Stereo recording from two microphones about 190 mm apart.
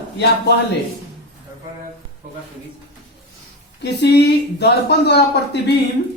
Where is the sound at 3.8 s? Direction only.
60° left (ahead or behind).